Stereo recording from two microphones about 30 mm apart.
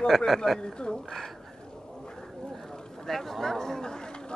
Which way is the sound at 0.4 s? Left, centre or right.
Left.